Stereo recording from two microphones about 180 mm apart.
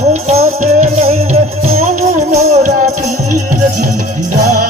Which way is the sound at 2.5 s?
40° right (ahead or behind).